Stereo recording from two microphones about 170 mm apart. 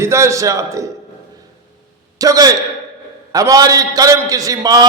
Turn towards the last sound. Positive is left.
turn(degrees=-20)  # may be behind; listen again after turning